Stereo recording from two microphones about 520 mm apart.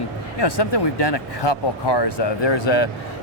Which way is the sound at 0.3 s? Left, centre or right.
Left.